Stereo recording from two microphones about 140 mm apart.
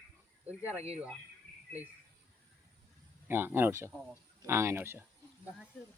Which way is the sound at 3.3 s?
15° right (ahead or behind).